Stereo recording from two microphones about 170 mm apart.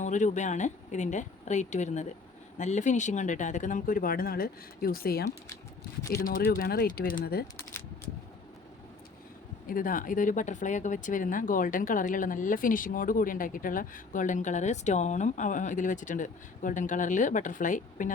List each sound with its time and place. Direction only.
0.0 s speech: 45° left (ahead or behind); by 7.4 s 60° left (ahead or behind)
9.6 s speech: 55° left (ahead or behind)